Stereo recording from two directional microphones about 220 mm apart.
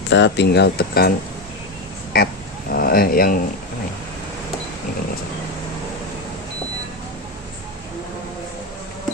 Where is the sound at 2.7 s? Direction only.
40° left (ahead or behind).